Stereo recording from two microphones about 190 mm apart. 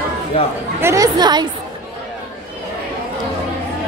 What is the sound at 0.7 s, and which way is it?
Speech, 15° right (ahead or behind).